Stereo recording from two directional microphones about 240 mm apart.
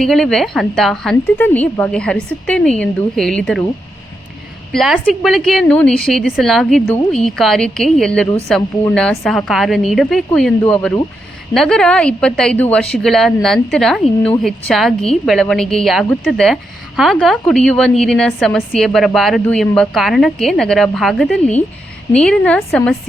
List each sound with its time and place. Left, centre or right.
0.0 s a woman's voice: centre
4.7 s a woman's voice: centre